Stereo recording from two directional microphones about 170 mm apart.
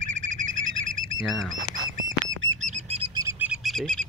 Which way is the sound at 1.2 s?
Centre (ahead or behind).